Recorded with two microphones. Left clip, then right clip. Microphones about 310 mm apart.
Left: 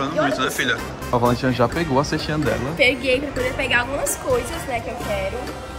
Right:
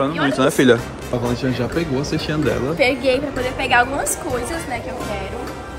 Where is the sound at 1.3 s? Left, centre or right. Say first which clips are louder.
Left 1 dB; centre.